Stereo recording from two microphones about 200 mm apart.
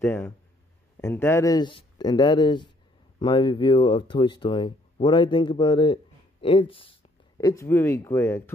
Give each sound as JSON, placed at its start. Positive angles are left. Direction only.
{"t": 0.0, "sound": "speech", "side_deg": 10}